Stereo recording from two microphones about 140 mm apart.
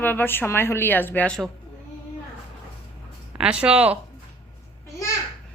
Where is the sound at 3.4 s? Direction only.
5° right (ahead or behind).